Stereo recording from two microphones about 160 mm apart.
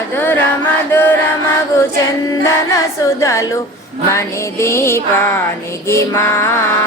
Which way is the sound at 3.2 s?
20° left (ahead or behind).